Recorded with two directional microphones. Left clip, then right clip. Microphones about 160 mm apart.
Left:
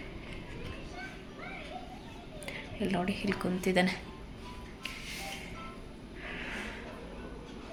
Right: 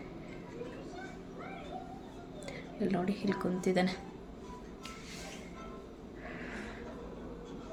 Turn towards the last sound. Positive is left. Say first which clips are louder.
# left 4 dB
turn(degrees=15)  # may be behind; listen again after turning